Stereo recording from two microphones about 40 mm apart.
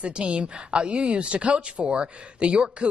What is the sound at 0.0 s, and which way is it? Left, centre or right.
A woman's voice, right.